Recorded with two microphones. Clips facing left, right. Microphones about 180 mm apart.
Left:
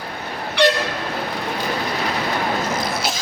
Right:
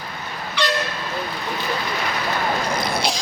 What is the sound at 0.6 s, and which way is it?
Train, 60° left (ahead or behind).